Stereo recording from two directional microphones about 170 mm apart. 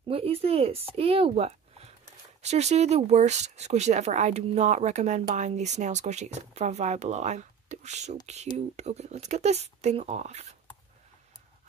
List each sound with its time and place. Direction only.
0.1 s speech: 35° right (ahead or behind)